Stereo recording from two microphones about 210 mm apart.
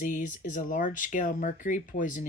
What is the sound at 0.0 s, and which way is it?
Speech, 40° left (ahead or behind).